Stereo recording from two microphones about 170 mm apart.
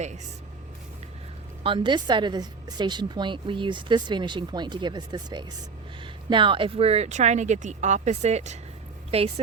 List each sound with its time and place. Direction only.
1.6 s a woman's voice: 30° right (ahead or behind)